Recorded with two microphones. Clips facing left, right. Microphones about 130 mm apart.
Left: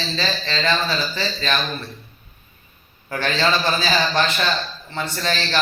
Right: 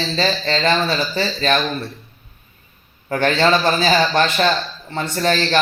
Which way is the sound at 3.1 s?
50° right (ahead or behind).